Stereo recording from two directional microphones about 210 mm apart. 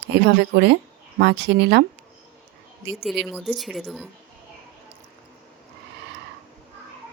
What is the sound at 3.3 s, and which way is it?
Speech, centre (ahead or behind).